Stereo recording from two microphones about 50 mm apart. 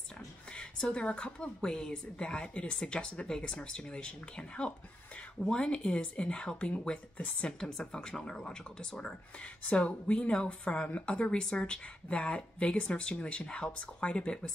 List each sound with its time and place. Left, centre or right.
0.6 s a woman's voice: centre
9.7 s a woman's voice: left